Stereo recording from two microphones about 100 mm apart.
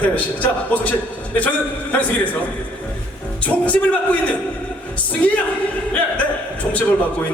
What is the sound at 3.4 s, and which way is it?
Speech, 15° left (ahead or behind).